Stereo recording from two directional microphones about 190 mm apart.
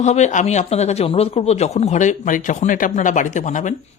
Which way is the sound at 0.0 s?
40° left (ahead or behind).